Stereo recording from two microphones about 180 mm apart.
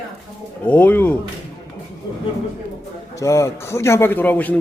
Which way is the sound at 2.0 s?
25° left (ahead or behind).